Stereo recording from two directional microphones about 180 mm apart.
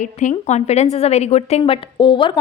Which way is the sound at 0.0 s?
45° left (ahead or behind).